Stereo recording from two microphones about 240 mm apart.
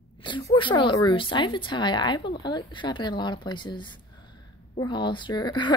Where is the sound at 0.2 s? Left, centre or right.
Centre.